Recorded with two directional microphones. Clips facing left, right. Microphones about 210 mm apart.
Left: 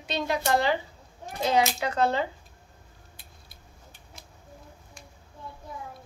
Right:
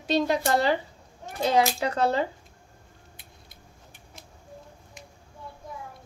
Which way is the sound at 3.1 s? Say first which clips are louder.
Right 2 dB; 20° right (ahead or behind).